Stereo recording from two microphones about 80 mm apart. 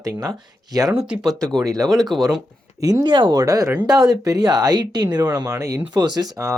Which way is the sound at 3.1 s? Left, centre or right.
Right.